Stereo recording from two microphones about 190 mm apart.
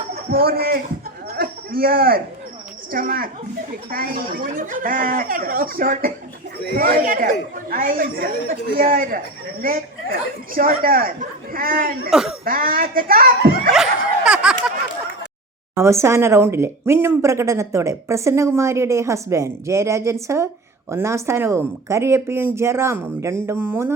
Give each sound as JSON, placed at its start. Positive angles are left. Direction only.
{"t": 0.3, "sound": "a woman's voice", "side_deg": -50}
{"t": 12.1, "sound": "speech", "side_deg": 0}
{"t": 12.5, "sound": "a woman's voice", "side_deg": -50}
{"t": 14.3, "sound": "a sound", "side_deg": -5}
{"t": 15.7, "sound": "speech", "side_deg": -15}